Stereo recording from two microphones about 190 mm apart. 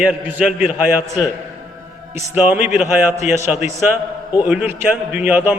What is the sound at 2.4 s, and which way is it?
Speech, 10° right (ahead or behind).